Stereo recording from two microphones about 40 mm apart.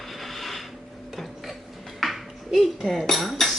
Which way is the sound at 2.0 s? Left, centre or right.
Centre.